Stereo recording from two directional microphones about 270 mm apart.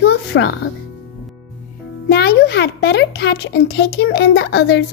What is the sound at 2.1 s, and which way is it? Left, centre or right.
A child's voice, left.